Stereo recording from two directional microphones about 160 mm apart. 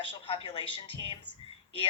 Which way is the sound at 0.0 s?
30° left (ahead or behind).